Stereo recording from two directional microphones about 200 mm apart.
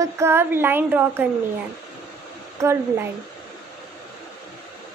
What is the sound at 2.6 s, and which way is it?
Speech, 10° right (ahead or behind).